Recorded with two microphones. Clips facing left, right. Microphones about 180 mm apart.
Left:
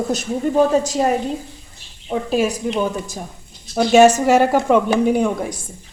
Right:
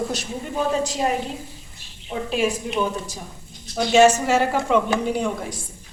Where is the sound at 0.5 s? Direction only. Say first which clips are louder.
Left 6 dB; 45° left (ahead or behind).